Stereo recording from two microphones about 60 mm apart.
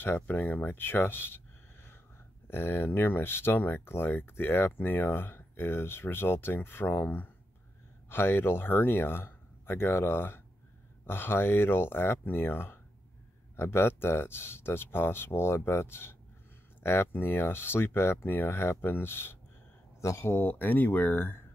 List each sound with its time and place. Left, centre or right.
0.0 s speech: left
20.0 s speech: left